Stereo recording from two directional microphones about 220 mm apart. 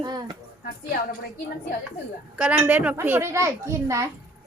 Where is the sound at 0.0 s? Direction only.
20° right (ahead or behind).